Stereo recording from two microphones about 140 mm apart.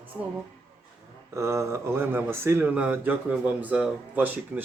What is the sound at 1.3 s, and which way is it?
Speech, 20° right (ahead or behind).